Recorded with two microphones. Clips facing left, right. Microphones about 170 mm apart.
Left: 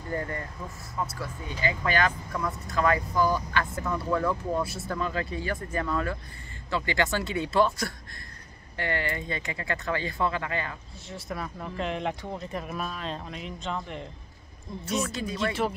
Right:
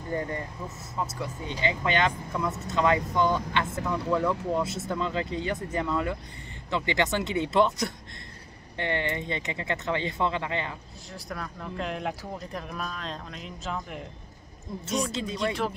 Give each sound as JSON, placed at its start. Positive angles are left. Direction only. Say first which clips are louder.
{"t": 0.1, "sound": "speech", "louder": "right 1 dB", "side_deg": -20}
{"t": 11.1, "sound": "speech", "louder": "left 2 dB", "side_deg": 0}
{"t": 15.0, "sound": "speech", "louder": "right 1 dB", "side_deg": -25}
{"t": 15.3, "sound": "speech", "louder": "left 1 dB", "side_deg": 0}